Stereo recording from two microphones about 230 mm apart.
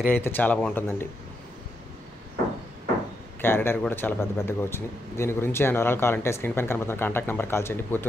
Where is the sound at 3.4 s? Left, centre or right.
Centre.